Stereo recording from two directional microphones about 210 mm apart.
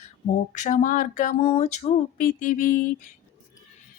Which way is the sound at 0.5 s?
35° left (ahead or behind).